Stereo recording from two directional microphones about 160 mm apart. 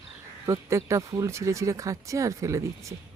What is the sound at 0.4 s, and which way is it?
Speech, 20° right (ahead or behind).